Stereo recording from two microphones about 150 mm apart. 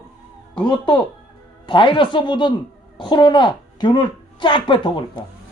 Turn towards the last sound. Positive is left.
turn(degrees=30)  # may be behind; listen again after turning